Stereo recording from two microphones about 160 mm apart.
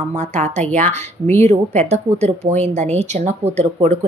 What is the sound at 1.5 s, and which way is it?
A woman's voice, 45° right (ahead or behind).